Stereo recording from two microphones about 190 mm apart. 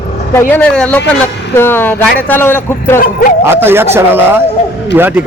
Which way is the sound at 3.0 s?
45° left (ahead or behind).